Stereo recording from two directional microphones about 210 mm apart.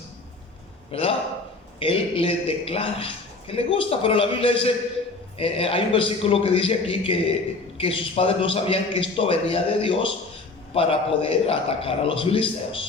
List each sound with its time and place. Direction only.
0.9 s a man's voice: 25° left (ahead or behind)